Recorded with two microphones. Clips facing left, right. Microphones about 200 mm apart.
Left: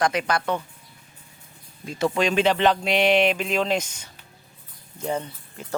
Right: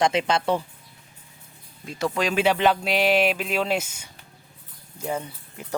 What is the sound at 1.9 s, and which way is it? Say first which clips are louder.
Speech: left 3 dB; centre (ahead or behind).